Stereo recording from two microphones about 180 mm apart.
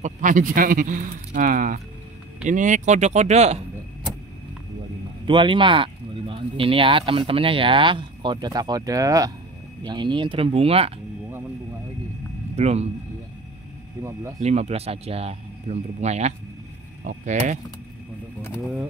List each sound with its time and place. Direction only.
0.0 s speech: 45° right (ahead or behind)
5.2 s speech: 25° right (ahead or behind)
12.5 s speech: 35° right (ahead or behind)
14.4 s speech: 35° right (ahead or behind)
18.6 s speech: centre (ahead or behind)